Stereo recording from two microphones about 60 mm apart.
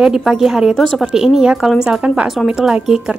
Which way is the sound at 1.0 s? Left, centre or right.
Centre.